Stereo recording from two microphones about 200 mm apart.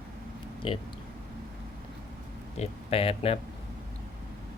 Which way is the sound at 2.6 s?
30° left (ahead or behind).